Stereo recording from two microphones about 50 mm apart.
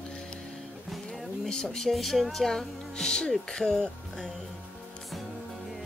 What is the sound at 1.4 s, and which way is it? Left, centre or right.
Music, centre.